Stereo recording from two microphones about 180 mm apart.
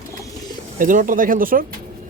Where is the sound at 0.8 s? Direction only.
50° right (ahead or behind).